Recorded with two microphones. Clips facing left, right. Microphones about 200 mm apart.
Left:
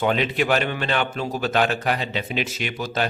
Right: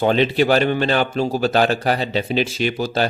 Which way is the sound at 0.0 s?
30° right (ahead or behind).